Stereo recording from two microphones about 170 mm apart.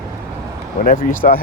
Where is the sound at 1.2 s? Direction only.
60° left (ahead or behind).